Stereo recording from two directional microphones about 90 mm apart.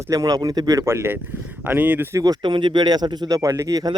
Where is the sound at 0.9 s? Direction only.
25° right (ahead or behind).